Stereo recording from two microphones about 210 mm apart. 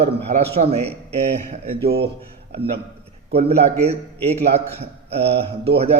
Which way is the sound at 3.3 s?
30° right (ahead or behind).